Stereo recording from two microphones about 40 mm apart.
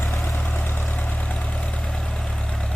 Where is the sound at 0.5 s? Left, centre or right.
Left.